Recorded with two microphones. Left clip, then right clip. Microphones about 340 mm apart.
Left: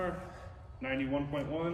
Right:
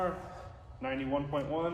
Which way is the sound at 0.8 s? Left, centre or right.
Centre.